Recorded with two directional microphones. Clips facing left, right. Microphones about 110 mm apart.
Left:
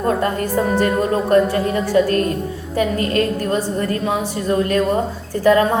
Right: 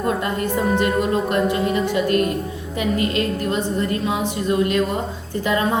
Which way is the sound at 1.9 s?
35° left (ahead or behind).